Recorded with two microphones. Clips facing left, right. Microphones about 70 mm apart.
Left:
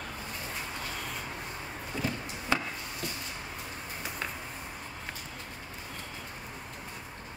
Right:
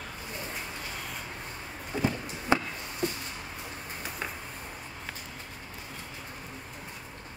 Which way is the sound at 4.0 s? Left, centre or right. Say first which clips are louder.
Even; centre.